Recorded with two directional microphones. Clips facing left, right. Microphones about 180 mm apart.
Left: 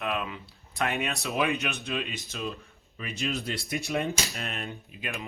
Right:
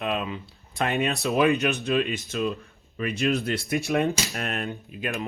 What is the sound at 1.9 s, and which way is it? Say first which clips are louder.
Speech: right 9 dB; 55° right (ahead or behind).